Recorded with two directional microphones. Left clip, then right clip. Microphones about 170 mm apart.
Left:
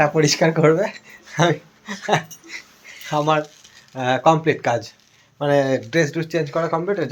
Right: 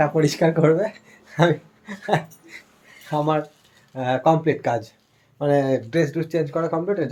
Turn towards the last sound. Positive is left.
turn(degrees=0)  # may be behind; listen again after turning